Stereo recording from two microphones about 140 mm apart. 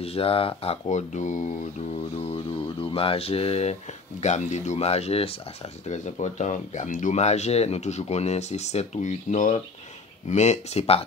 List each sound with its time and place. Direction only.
0.0 s speech: 45° left (ahead or behind)
0.8 s speech: 60° left (ahead or behind)
2.2 s speech: 40° left (ahead or behind)
5.9 s speech: 55° left (ahead or behind)